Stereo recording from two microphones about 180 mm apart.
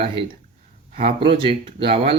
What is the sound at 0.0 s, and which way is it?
Speech, 30° right (ahead or behind).